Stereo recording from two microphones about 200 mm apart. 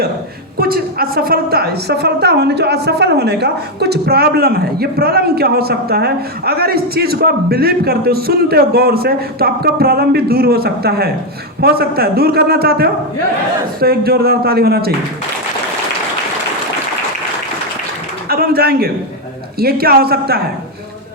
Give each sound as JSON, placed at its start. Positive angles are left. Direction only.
{"t": 0.6, "sound": "a woman's voice", "side_deg": -50}
{"t": 18.3, "sound": "a sound", "side_deg": -50}
{"t": 19.5, "sound": "a woman's voice", "side_deg": -50}